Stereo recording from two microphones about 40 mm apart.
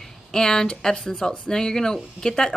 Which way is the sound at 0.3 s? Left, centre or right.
Centre.